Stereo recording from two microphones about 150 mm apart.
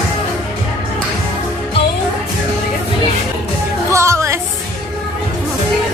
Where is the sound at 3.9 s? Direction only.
20° right (ahead or behind).